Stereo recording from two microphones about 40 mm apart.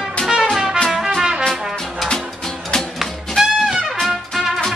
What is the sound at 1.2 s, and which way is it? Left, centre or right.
Brass instrument, centre.